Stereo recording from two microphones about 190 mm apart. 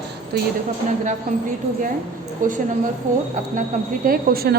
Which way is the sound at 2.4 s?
45° right (ahead or behind).